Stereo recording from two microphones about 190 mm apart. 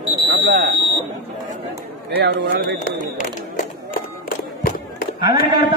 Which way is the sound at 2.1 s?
60° right (ahead or behind).